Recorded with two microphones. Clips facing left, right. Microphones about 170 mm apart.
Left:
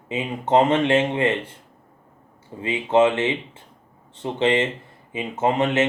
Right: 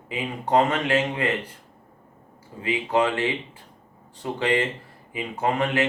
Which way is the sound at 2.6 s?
25° left (ahead or behind).